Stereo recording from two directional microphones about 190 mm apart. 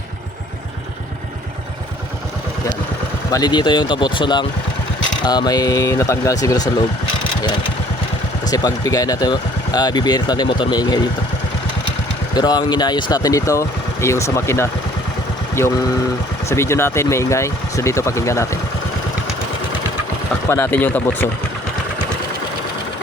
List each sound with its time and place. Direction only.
3.3 s speech: 25° left (ahead or behind)
8.4 s speech: 20° left (ahead or behind)
12.3 s speech: 20° left (ahead or behind)
20.5 s speech: 10° left (ahead or behind)